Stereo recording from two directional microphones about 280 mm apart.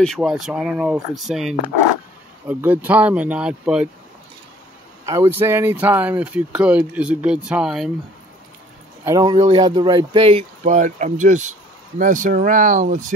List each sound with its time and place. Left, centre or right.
0.0 s speech: centre
5.0 s speech: centre
9.0 s speech: centre